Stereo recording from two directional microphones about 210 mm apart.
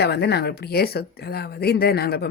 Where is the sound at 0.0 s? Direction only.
50° left (ahead or behind).